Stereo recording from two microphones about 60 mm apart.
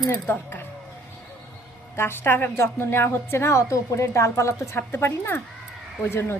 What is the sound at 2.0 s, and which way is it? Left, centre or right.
A woman's voice, left.